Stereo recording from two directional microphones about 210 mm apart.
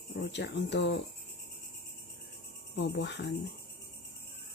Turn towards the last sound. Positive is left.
turn(degrees=55)  # may be behind; listen again after turning